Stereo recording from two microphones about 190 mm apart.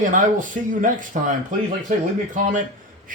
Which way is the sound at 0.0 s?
45° right (ahead or behind).